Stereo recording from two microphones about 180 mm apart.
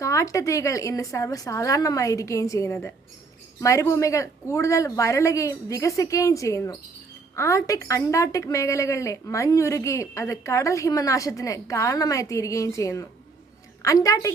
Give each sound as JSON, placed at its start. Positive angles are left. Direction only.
{"t": 0.0, "sound": "a woman's voice", "side_deg": 15}